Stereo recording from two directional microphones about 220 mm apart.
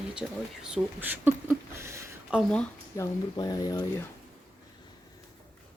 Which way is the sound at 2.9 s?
15° left (ahead or behind).